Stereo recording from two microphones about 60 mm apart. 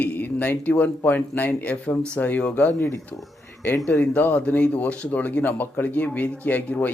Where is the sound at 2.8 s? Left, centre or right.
Left.